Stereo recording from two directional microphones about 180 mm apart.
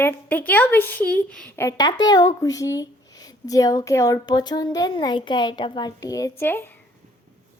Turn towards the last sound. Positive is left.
turn(degrees=10)  # may be behind; listen again after turning